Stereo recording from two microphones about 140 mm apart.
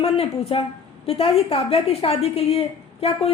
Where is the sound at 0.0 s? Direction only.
45° left (ahead or behind).